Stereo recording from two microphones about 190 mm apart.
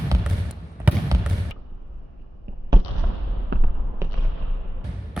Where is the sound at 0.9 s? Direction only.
10° right (ahead or behind).